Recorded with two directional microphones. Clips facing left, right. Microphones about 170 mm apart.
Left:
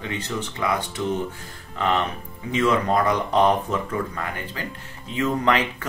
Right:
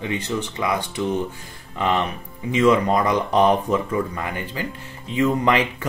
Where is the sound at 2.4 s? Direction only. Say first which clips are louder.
Right 4 dB; 15° right (ahead or behind).